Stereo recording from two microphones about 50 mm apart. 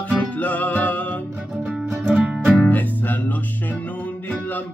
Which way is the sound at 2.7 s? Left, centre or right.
Left.